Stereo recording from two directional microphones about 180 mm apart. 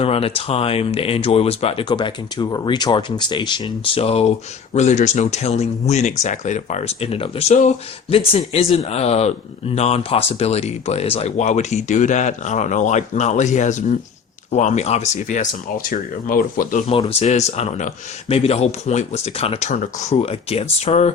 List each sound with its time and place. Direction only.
0.0 s speech: 35° left (ahead or behind); by 16.8 s 50° left (ahead or behind)
17.2 s speech: 35° left (ahead or behind)